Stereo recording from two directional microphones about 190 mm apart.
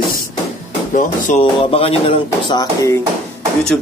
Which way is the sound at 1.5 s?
30° left (ahead or behind).